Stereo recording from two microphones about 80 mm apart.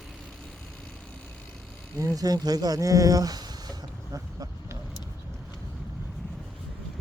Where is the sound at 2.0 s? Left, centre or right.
Right.